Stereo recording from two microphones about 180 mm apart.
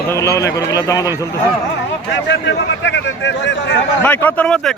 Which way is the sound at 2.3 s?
80° left.